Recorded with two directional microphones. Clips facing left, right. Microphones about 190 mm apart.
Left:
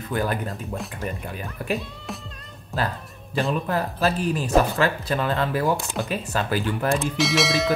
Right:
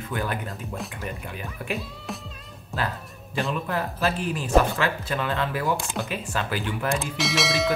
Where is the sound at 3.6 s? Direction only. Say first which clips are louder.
Left 3 dB; 40° left (ahead or behind).